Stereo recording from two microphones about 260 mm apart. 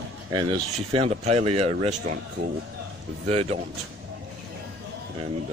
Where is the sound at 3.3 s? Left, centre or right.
Right.